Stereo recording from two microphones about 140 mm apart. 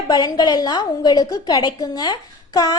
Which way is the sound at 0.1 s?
30° left (ahead or behind).